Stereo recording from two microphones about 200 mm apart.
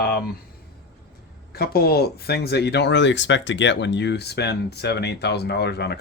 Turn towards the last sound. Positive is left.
turn(degrees=55)  # may be behind; listen again after turning